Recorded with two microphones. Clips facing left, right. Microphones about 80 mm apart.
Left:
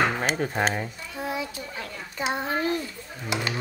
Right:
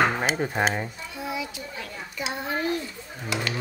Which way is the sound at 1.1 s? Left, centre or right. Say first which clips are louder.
Left 2 dB; left.